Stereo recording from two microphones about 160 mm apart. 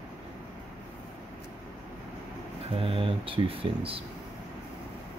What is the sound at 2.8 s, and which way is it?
Speech, 35° right (ahead or behind).